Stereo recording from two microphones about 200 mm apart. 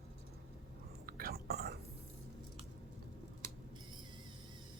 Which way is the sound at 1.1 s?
50° right (ahead or behind).